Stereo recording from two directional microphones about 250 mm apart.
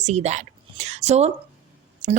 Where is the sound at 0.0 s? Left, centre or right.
Right.